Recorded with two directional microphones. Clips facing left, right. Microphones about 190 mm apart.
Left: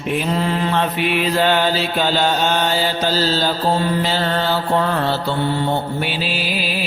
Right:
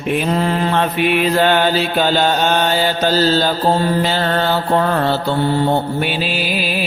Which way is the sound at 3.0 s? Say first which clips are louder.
Right 6 dB; 55° right (ahead or behind).